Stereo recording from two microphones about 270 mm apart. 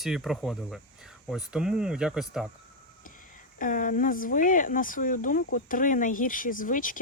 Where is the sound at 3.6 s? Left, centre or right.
Left.